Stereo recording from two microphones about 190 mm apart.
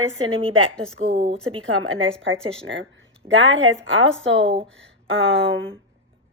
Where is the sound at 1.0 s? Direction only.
90° right.